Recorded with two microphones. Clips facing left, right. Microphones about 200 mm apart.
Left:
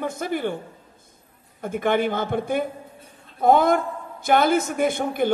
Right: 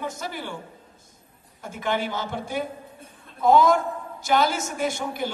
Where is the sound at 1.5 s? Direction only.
55° left (ahead or behind).